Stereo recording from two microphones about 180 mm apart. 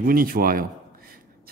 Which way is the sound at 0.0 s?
50° right (ahead or behind).